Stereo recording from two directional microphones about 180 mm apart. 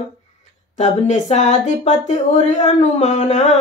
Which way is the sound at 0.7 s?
40° left (ahead or behind).